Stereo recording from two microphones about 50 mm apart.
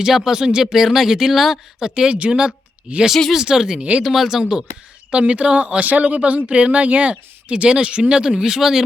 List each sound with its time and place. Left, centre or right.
0.0 s speech: centre
1.8 s speech: centre
2.9 s speech: right
3.3 s speech: centre
5.1 s speech: right